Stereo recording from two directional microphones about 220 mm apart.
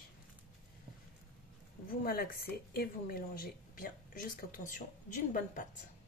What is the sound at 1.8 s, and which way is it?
Speech, 40° left (ahead or behind).